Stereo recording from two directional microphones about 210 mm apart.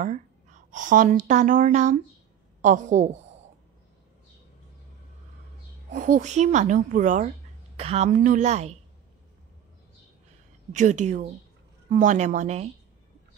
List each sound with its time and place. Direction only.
0.0 s speech: 35° right (ahead or behind)
5.9 s speech: 40° right (ahead or behind)
10.7 s speech: 35° right (ahead or behind)